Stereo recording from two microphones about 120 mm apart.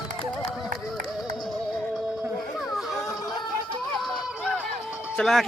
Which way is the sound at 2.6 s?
Centre (ahead or behind).